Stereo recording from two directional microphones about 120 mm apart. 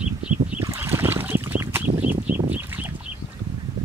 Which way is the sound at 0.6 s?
20° right (ahead or behind).